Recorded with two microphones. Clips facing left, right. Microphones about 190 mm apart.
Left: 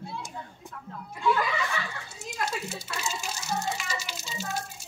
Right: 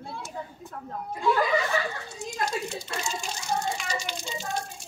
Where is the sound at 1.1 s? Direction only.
40° right (ahead or behind).